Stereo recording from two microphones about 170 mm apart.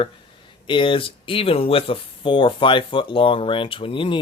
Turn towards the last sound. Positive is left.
turn(degrees=30)  # may be behind; listen again after turning